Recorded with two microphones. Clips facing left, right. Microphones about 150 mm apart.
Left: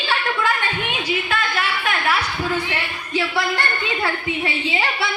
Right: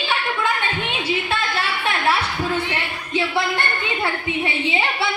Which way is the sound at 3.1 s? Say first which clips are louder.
Even; 20° right (ahead or behind).